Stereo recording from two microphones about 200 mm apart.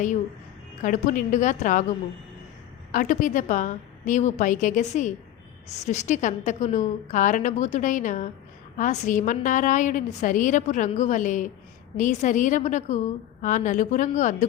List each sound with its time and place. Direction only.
0.8 s a woman's voice: 40° left (ahead or behind)
2.9 s a woman's voice: 40° left (ahead or behind)